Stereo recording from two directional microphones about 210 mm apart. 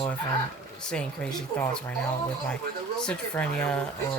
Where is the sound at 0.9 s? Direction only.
5° left (ahead or behind).